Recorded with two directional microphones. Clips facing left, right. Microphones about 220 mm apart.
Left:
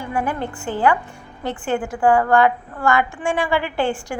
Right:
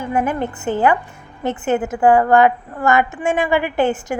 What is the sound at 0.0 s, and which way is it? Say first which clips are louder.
A woman's voice: right 4 dB; 20° right (ahead or behind).